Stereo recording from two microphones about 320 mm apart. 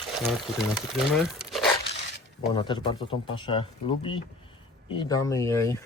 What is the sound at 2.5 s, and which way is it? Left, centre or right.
Speech, centre.